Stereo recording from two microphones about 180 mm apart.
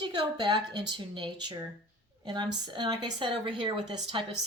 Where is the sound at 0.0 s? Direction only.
25° right (ahead or behind).